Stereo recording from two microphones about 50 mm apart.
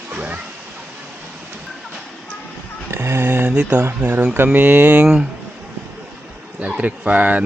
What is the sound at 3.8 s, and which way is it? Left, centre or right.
Speech, right.